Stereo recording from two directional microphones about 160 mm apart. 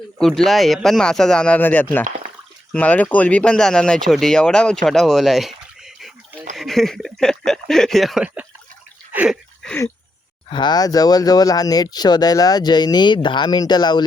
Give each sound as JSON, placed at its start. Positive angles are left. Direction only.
{"t": 0.2, "sound": "speech", "side_deg": 0}
{"t": 10.5, "sound": "speech", "side_deg": 25}